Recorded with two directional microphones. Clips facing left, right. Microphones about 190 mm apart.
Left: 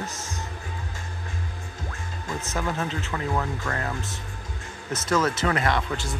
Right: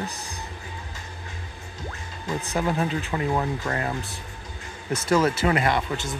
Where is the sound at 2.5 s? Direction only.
15° right (ahead or behind).